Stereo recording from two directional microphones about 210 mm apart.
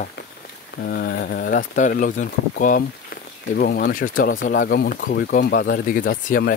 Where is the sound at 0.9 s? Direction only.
45° left (ahead or behind).